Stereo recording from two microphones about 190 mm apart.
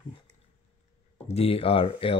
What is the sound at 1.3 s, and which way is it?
Speech, 30° left (ahead or behind).